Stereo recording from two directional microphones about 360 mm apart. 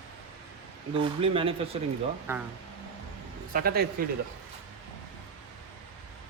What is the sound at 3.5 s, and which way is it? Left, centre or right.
Speech, right.